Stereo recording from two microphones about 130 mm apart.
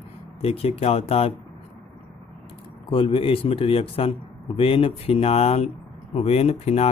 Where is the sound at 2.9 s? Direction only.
45° left (ahead or behind).